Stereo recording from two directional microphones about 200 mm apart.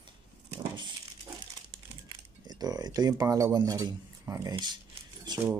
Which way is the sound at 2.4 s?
20° right (ahead or behind).